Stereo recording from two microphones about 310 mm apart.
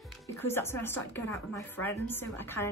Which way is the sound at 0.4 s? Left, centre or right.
Centre.